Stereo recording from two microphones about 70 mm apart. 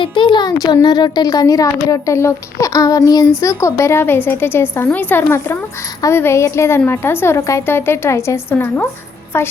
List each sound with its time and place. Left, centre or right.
0.3 s a woman's voice: left
7.3 s speech: left
7.7 s a woman's voice: left
8.5 s a woman's voice: left